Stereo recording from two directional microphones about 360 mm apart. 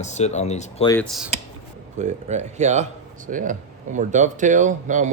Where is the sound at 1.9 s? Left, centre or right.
Centre.